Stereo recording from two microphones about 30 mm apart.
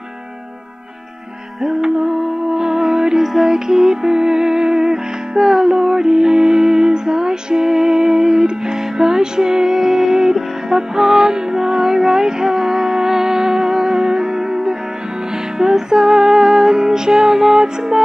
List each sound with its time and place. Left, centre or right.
1.8 s music: right